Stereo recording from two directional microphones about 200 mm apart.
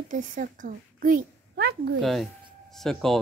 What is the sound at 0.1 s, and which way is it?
A child's voice, 40° right (ahead or behind).